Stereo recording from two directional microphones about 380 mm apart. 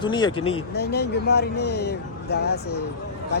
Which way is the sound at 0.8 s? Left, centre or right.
Left.